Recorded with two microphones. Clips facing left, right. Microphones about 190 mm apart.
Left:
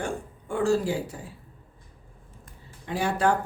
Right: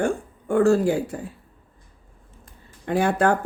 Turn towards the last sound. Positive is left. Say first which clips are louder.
# right 5 dB
turn(degrees=-55)  # may be behind; listen again after turning